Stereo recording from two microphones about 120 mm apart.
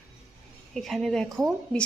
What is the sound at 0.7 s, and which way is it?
A woman's voice, centre (ahead or behind).